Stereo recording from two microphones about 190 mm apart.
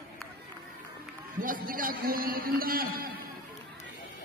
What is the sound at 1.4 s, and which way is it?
A man's voice, 45° right (ahead or behind).